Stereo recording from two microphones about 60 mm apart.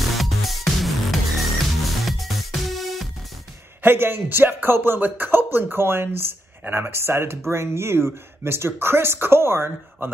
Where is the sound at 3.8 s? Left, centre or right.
Right.